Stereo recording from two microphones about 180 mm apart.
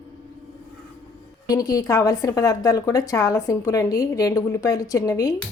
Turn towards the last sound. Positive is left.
turn(degrees=15)  # may be behind; listen again after turning